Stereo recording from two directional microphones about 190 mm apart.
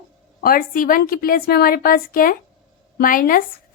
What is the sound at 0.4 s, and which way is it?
Speech, 45° left (ahead or behind).